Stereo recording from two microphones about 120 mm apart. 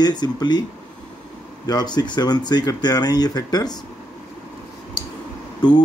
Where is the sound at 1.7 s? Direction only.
35° left (ahead or behind).